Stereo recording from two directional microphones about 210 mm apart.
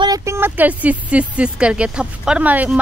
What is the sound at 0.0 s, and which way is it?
A woman's voice, 15° right (ahead or behind).